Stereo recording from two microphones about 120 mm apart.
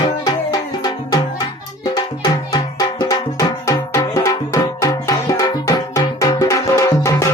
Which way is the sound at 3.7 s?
25° left (ahead or behind).